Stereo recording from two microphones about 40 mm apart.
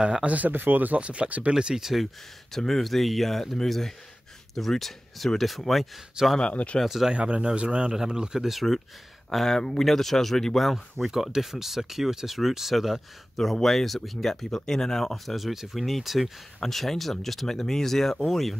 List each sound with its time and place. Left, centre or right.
0.0 s a man's voice: right
0.5 s speech: right
0.9 s speech: right
1.5 s a man's voice: centre
2.5 s speech: centre
6.2 s a man's voice: centre
6.5 s speech: left
7.1 s a man's voice: right
8.5 s speech: centre
13.4 s speech: centre
15.3 s speech: centre